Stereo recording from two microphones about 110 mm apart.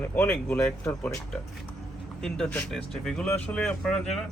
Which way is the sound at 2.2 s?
5° left (ahead or behind).